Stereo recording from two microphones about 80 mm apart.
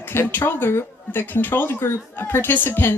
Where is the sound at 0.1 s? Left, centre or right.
Left.